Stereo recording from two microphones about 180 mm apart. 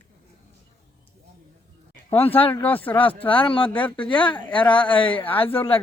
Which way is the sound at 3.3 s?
30° left (ahead or behind).